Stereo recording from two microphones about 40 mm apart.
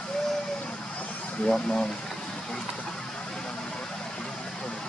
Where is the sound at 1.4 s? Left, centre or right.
Centre.